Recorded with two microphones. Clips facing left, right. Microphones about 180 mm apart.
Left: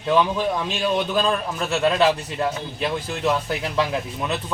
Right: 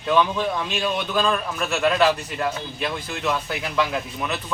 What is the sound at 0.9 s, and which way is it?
Speech, 30° left (ahead or behind).